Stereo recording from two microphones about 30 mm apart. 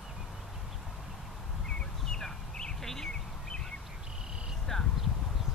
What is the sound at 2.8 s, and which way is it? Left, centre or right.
Bird, centre.